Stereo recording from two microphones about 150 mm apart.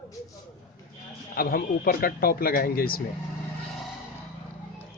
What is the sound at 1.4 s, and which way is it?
Speech, 80° left.